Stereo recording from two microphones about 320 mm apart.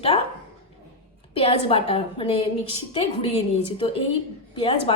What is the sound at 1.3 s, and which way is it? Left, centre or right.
A woman's voice, centre.